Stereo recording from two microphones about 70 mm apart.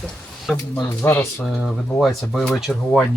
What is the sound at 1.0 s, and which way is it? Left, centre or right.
Speech, left.